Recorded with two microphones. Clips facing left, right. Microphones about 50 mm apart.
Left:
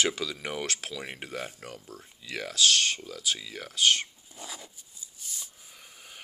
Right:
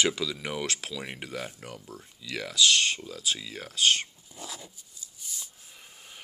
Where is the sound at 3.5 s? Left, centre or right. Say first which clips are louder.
Even; left.